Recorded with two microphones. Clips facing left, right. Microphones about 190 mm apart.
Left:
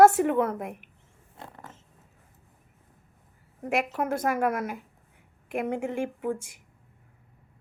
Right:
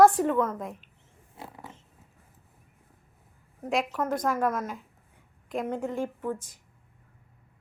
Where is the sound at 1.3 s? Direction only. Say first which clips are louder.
Right 1 dB; 5° right (ahead or behind).